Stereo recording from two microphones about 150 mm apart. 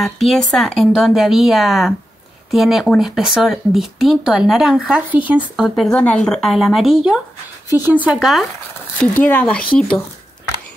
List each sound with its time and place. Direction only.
0.0 s speech: centre (ahead or behind)
9.0 s speech: 10° left (ahead or behind)